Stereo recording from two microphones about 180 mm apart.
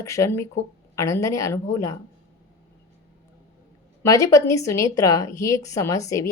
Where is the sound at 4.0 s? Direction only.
15° left (ahead or behind).